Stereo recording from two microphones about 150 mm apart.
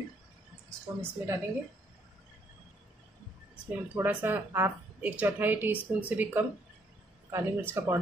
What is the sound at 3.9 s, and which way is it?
A woman's voice, 10° right (ahead or behind).